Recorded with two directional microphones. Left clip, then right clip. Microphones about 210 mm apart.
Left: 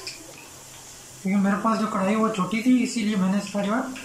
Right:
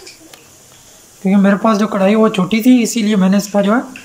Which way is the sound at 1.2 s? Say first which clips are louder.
Right 11 dB; 50° right (ahead or behind).